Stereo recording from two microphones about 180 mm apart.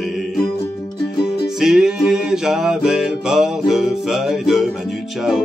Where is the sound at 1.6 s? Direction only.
Centre (ahead or behind).